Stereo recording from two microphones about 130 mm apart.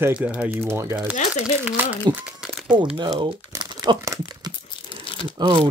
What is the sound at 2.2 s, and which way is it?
Crumpling, 5° right (ahead or behind).